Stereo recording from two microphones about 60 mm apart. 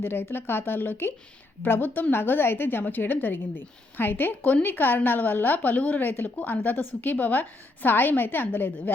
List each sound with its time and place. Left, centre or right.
0.0 s a woman's voice: left